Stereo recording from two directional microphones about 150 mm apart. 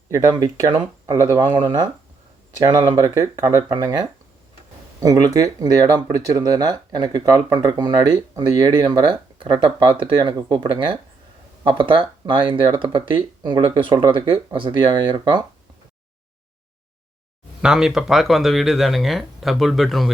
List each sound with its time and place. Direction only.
0.1 s speech: 25° right (ahead or behind)
17.6 s speech: 5° right (ahead or behind)